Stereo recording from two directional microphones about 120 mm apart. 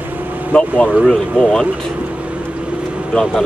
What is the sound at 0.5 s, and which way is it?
Speech, 10° left (ahead or behind).